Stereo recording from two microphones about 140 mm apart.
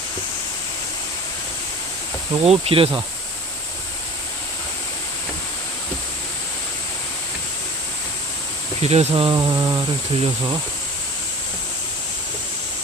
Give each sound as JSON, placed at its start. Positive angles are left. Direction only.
{"t": 2.4, "sound": "speech", "side_deg": -45}
{"t": 8.8, "sound": "speech", "side_deg": -50}
{"t": 9.3, "sound": "a sound", "side_deg": -30}